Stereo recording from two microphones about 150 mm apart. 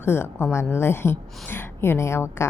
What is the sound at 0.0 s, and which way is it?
A woman's voice, 15° left (ahead or behind).